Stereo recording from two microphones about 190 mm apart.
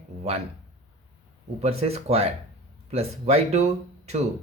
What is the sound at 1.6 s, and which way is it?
Speech, 30° right (ahead or behind).